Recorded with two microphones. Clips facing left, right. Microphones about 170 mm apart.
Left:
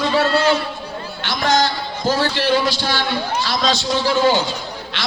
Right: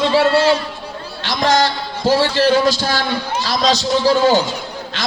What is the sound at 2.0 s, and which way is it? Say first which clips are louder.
A man's voice: right 5 dB; 30° right (ahead or behind).